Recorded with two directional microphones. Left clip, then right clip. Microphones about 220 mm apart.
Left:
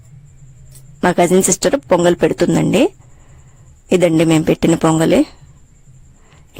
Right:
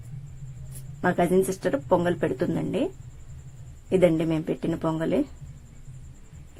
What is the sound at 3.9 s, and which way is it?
Speech, 50° left (ahead or behind).